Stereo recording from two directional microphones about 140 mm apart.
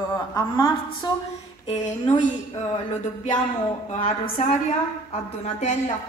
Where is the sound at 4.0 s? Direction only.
70° left (ahead or behind).